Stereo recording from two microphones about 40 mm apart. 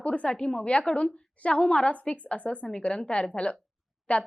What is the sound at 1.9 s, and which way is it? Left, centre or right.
A woman's voice, left.